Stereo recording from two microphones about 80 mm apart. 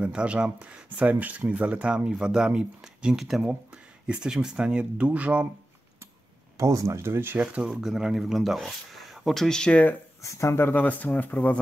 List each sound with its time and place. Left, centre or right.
0.0 s speech: centre
6.5 s speech: right
7.3 s speech: centre
10.2 s speech: left